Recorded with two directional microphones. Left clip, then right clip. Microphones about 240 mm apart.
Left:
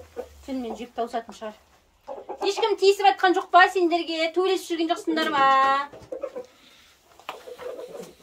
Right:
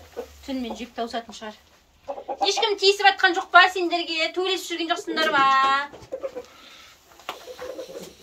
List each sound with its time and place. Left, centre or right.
0.6 s speech: left
2.4 s a woman's voice: left